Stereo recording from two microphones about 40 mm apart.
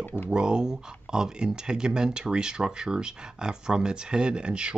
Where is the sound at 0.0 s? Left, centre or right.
Left.